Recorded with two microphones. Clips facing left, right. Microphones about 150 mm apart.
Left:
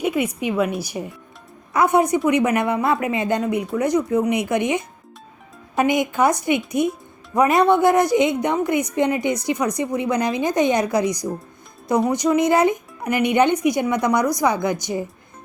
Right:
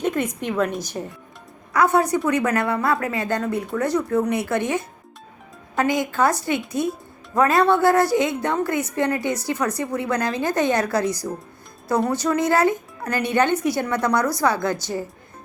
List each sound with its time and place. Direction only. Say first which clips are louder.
0.0 s a woman's voice: left 2 dB; 10° left (ahead or behind)